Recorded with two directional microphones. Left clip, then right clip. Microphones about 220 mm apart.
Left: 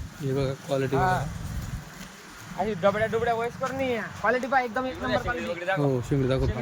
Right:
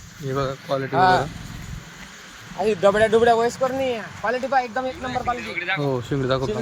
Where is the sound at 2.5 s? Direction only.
45° right (ahead or behind).